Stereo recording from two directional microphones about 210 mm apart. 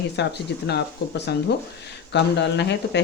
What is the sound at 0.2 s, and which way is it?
Speech, 55° left (ahead or behind).